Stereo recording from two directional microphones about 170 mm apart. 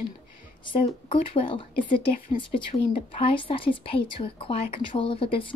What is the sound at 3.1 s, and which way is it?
A woman's voice, 30° left (ahead or behind).